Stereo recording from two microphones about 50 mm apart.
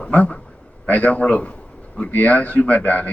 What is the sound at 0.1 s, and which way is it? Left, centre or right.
A man's voice, left.